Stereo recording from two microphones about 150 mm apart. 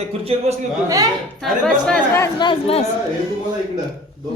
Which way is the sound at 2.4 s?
35° left (ahead or behind).